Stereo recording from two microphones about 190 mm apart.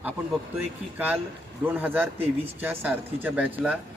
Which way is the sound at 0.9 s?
10° right (ahead or behind).